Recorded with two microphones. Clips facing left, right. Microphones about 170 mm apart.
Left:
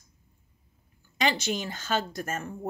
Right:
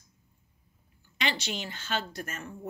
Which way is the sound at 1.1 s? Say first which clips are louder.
Left 5 dB; 45° left (ahead or behind).